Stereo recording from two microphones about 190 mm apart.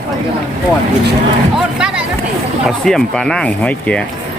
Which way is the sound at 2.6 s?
Centre (ahead or behind).